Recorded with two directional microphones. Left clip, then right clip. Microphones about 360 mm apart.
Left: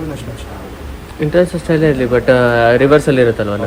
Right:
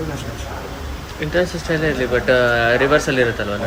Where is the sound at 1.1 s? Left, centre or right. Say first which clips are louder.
Left 6 dB; centre.